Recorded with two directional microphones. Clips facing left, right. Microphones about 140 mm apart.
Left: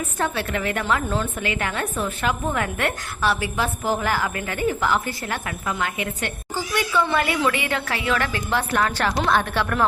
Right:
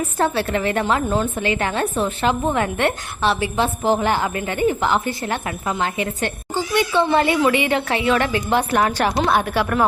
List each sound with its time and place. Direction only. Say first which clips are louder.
0.2 s a woman's voice: right 5 dB; 30° right (ahead or behind); by 9.8 s 10° right (ahead or behind)